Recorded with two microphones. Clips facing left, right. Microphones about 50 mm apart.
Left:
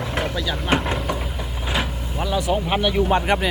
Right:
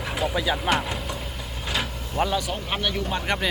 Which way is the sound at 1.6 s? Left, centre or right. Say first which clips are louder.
Left 3 dB; centre.